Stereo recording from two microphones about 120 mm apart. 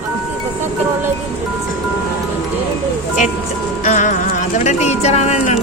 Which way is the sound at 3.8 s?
90° left.